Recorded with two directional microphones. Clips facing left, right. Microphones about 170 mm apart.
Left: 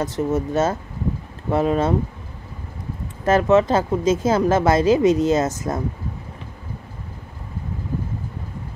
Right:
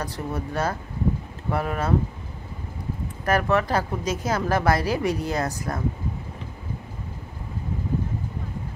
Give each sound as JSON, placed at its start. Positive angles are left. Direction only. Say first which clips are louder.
{"t": 0.0, "sound": "speech", "louder": "left 8 dB", "side_deg": 20}
{"t": 3.3, "sound": "speech", "louder": "left 6 dB", "side_deg": 20}